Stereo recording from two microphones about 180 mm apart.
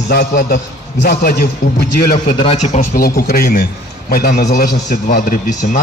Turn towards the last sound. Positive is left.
turn(degrees=50)  # may be behind; listen again after turning